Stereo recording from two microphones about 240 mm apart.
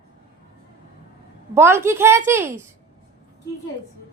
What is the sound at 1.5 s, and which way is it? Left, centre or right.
A woman's voice, centre.